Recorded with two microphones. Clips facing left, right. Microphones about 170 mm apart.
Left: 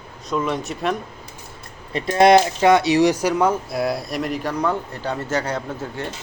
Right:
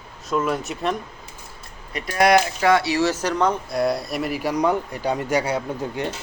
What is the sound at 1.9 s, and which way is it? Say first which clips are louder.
Speech: left 4 dB; 25° left (ahead or behind).